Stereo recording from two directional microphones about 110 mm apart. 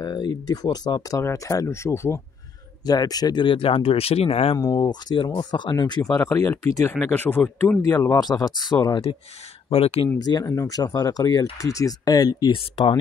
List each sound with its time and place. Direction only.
0.0 s speech: 40° left (ahead or behind)
2.9 s speech: 35° left (ahead or behind); by 4.6 s 65° left (ahead or behind)
4.6 s speech: 40° left (ahead or behind)
6.0 s speech: 15° left (ahead or behind)
6.3 s speech: 30° left (ahead or behind)
8.2 s speech: 35° left (ahead or behind)
9.7 s speech: 65° left (ahead or behind)
10.1 s speech: 35° left (ahead or behind)